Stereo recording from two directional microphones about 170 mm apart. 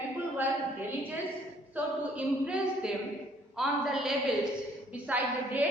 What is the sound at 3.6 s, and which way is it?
A woman's voice, centre (ahead or behind).